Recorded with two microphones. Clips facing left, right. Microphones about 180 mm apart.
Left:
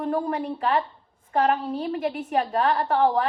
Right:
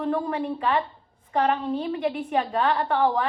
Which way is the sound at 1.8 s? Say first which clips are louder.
Even; 45° left (ahead or behind).